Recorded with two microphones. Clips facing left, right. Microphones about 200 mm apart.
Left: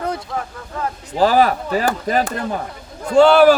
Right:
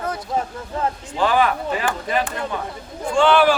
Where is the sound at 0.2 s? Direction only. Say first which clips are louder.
Right 3 dB; 20° right (ahead or behind).